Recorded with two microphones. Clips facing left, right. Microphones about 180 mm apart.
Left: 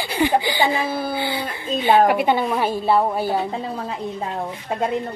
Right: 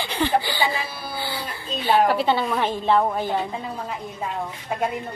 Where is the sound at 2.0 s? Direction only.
15° left (ahead or behind).